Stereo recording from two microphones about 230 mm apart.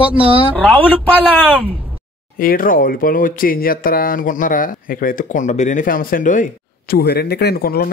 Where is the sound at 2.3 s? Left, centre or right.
Left.